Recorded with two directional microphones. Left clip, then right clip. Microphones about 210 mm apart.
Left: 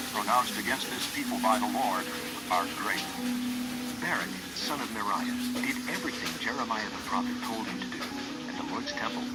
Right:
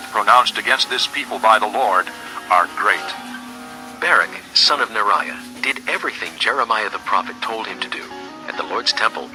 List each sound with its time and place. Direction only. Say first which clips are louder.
0.1 s speech: right 14 dB; 35° right (ahead or behind)
4.0 s speech: right 17 dB; 35° right (ahead or behind)
6.4 s speech: right 16 dB; 35° right (ahead or behind)